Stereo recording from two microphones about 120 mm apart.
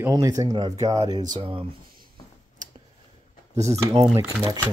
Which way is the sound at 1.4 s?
50° right (ahead or behind).